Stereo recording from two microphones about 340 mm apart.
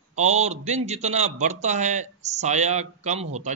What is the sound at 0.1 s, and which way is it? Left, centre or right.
A man's voice, centre.